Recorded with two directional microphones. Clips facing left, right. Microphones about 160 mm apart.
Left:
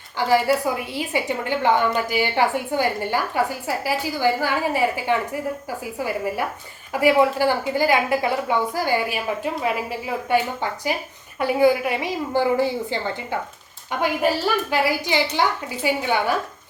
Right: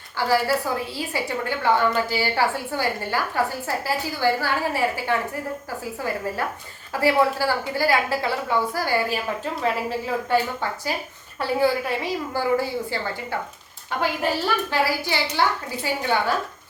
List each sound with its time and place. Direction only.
0.3 s a woman's voice: 15° left (ahead or behind)